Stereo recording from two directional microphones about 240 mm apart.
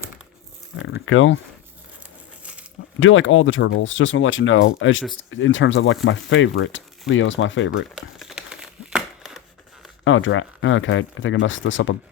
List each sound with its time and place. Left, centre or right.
1.0 s speech: left
2.4 s a sound: centre
3.0 s speech: left
7.9 s crumpling: centre
10.0 s speech: left